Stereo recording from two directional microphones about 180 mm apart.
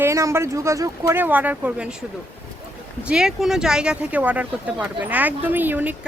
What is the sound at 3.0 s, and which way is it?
Speech, 5° right (ahead or behind).